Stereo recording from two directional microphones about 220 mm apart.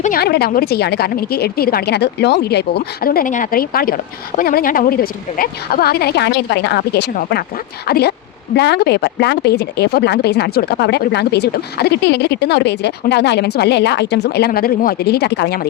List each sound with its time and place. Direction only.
0.0 s speech: 40° left (ahead or behind)